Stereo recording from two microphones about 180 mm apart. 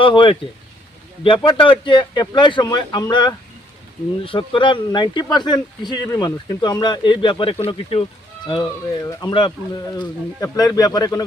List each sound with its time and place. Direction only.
0.0 s speech: 30° left (ahead or behind)
1.5 s speech: 30° left (ahead or behind)